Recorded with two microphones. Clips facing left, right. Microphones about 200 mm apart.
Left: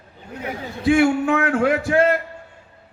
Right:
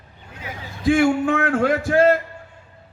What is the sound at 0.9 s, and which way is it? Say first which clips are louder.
Speech: left 1 dB; 50° right (ahead or behind).